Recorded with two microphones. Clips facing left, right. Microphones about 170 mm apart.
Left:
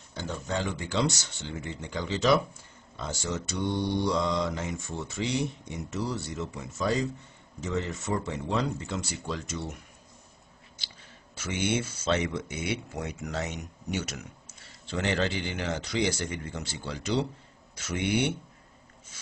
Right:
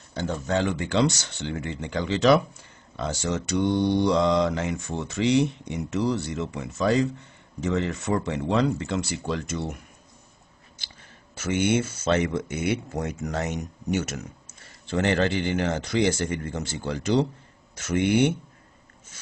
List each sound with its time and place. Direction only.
0.1 s speech: 65° right (ahead or behind)
11.3 s speech: 55° right (ahead or behind)